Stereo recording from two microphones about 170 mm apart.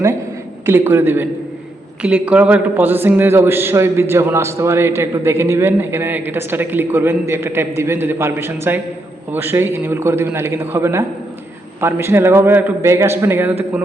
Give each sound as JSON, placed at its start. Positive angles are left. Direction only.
{"t": 0.6, "sound": "a man's voice", "side_deg": -15}